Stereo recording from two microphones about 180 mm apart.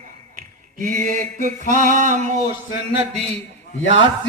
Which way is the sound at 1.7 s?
45° right (ahead or behind).